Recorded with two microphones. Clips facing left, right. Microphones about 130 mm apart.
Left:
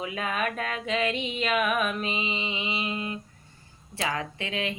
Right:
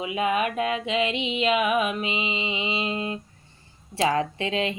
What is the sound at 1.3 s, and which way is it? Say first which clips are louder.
Mantra: right 4 dB; 15° right (ahead or behind).